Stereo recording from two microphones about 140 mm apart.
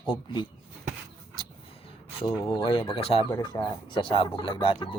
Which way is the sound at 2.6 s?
35° left (ahead or behind).